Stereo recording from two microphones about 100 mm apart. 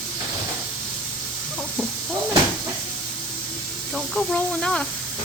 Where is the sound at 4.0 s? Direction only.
10° left (ahead or behind).